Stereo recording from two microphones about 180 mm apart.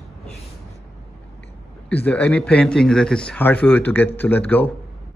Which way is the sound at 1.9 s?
10° left (ahead or behind).